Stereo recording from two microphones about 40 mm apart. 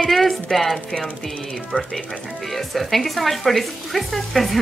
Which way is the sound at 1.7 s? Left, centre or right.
Left.